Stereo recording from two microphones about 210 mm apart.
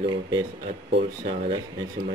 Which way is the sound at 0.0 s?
20° right (ahead or behind).